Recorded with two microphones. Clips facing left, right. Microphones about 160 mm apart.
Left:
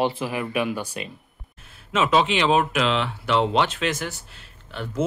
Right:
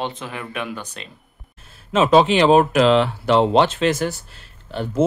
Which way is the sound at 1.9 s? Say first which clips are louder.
Right 6 dB; 35° right (ahead or behind).